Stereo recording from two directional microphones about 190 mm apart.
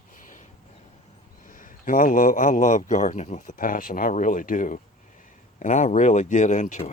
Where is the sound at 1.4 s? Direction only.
45° left (ahead or behind).